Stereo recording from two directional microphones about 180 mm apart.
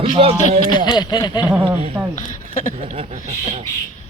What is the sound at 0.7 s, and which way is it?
Speech, 25° left (ahead or behind).